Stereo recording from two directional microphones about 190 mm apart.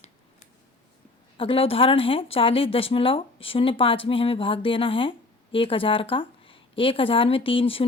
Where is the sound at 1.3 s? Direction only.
30° left (ahead or behind).